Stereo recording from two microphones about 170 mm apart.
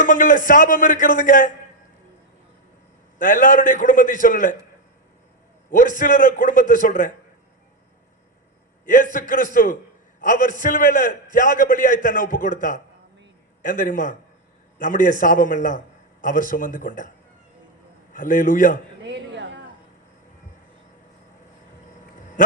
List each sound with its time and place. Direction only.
0.0 s a man's voice: 50° left (ahead or behind)
3.2 s a man's voice: 50° left (ahead or behind)
6.0 s a man's voice: 50° left (ahead or behind)
9.1 s a man's voice: 50° left (ahead or behind)
18.1 s a man's voice: 50° left (ahead or behind)
19.0 s a sound: 90° right
22.4 s speech: 50° left (ahead or behind)